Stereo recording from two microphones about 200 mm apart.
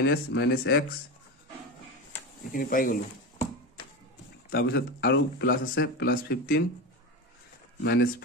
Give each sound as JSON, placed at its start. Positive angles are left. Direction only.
{"t": 0.0, "sound": "speech", "side_deg": 60}
{"t": 2.5, "sound": "speech", "side_deg": 45}
{"t": 4.5, "sound": "speech", "side_deg": 55}
{"t": 7.8, "sound": "speech", "side_deg": 55}